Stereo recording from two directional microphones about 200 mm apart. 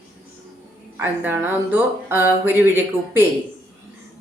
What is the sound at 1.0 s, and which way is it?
Speech, 10° right (ahead or behind).